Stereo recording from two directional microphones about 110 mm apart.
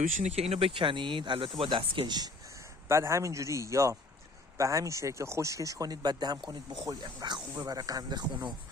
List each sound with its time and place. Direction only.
0.2 s speech: 80° right
0.8 s speech: 50° right (ahead or behind)
2.9 s a man's voice: 25° right (ahead or behind); by 7.4 s 40° right (ahead or behind)
7.5 s speech: 30° right (ahead or behind)